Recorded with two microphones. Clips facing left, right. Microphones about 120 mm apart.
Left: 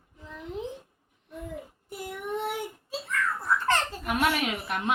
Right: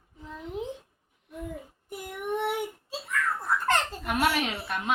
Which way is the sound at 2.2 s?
20° right (ahead or behind).